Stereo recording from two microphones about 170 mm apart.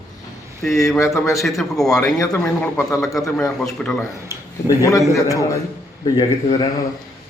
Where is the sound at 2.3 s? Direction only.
15° left (ahead or behind).